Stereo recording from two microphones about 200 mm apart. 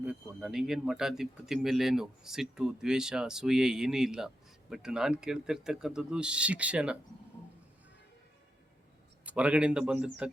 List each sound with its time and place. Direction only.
0.0 s speech: 5° right (ahead or behind)
9.2 s speech: 5° right (ahead or behind)